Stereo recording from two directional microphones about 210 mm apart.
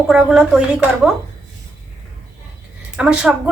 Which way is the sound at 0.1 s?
5° right (ahead or behind).